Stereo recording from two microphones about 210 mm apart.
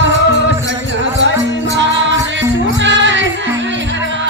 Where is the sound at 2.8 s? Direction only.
60° right (ahead or behind).